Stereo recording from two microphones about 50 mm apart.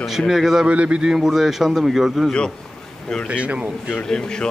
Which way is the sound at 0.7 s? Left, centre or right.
Right.